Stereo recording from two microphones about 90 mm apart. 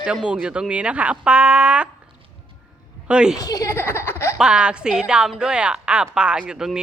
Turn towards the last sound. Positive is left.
turn(degrees=-10)  # may be behind; listen again after turning